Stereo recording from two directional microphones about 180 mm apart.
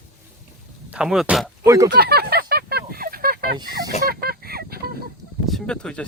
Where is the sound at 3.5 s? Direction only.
25° right (ahead or behind).